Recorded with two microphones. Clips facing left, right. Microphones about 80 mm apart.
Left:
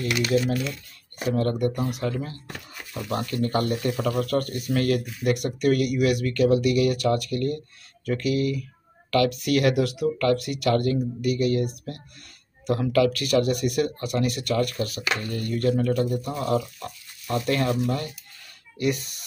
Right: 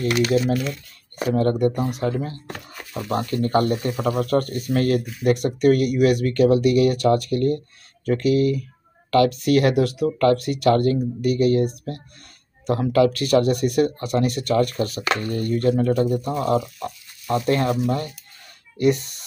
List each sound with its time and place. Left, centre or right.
0.0 s speech: right
2.9 s speech: centre
3.4 s speech: right